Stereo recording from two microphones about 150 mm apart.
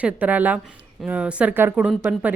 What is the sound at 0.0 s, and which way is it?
A woman's voice, 10° right (ahead or behind).